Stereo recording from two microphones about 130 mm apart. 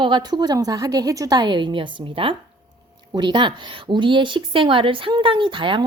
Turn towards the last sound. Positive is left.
turn(degrees=-40)  # may be behind; listen again after turning